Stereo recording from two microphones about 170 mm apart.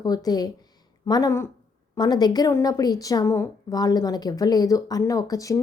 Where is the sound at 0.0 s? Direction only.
20° left (ahead or behind).